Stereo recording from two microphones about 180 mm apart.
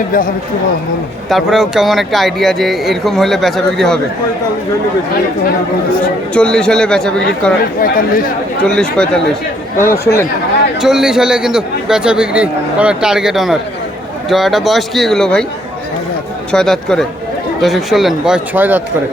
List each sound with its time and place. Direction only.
1.3 s a man's voice: centre (ahead or behind)
6.3 s a man's voice: 5° left (ahead or behind)
7.8 s speech: 50° left (ahead or behind)
8.6 s a man's voice: 5° left (ahead or behind)
10.8 s a man's voice: 5° right (ahead or behind)
16.5 s a man's voice: centre (ahead or behind)